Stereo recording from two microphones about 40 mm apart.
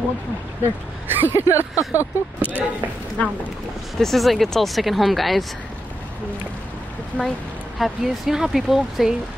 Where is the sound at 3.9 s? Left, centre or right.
Centre.